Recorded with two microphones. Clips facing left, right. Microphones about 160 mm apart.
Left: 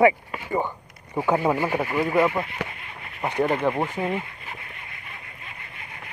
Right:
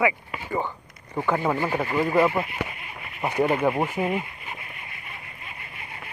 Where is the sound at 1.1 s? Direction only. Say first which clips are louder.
Left 2 dB; 15° left (ahead or behind).